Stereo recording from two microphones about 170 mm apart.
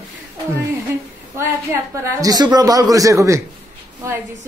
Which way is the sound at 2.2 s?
25° right (ahead or behind).